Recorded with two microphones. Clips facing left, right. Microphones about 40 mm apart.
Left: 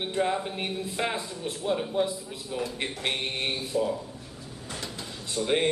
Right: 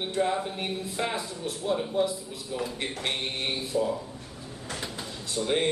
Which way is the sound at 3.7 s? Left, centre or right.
Centre.